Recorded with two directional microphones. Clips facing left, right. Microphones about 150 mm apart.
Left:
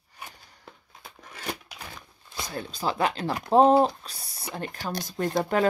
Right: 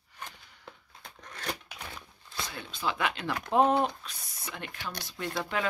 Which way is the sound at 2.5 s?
40° left (ahead or behind).